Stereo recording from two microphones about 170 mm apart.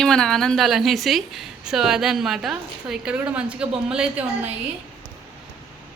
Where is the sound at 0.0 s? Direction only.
5° left (ahead or behind).